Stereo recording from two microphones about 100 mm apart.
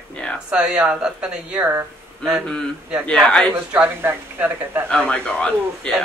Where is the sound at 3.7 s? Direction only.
15° right (ahead or behind).